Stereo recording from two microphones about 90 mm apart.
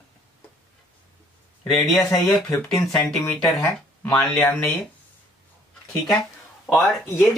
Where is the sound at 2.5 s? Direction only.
35° left (ahead or behind).